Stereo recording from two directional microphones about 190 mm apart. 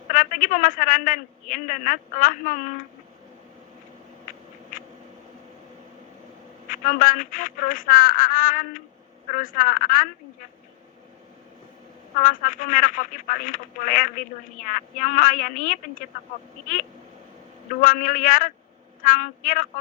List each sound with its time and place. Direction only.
0.1 s speech: 45° left (ahead or behind)
6.7 s speech: 45° left (ahead or behind)
12.2 s speech: 45° left (ahead or behind)
17.7 s speech: 45° left (ahead or behind)